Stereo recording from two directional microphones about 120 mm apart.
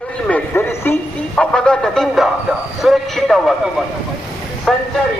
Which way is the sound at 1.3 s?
5° left (ahead or behind).